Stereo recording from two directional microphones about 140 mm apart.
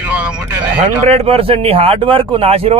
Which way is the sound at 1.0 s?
45° right (ahead or behind).